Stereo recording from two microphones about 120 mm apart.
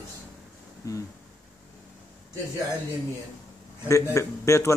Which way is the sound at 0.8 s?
25° left (ahead or behind).